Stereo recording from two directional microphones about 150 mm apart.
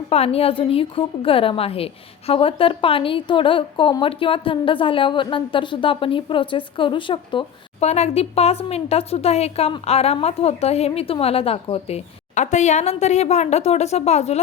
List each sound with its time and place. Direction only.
0.1 s a woman's voice: 40° left (ahead or behind)
7.9 s a woman's voice: 45° left (ahead or behind)